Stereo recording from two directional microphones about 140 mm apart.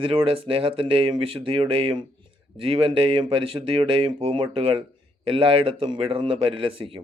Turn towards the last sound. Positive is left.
turn(degrees=-40)  # may be behind; listen again after turning